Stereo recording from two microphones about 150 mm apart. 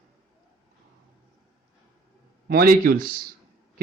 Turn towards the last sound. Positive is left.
turn(degrees=-75)  # may be behind; listen again after turning